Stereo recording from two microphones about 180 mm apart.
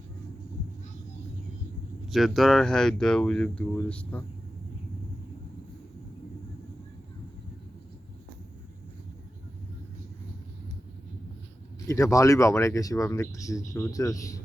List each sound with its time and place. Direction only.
2.0 s speech: centre (ahead or behind)
11.9 s speech: 15° left (ahead or behind)